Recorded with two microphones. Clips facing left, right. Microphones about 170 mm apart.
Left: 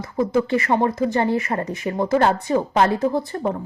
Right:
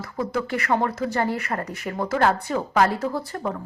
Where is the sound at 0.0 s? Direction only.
20° left (ahead or behind).